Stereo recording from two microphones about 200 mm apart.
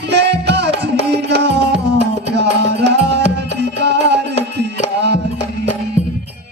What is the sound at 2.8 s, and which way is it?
Music, 55° right (ahead or behind).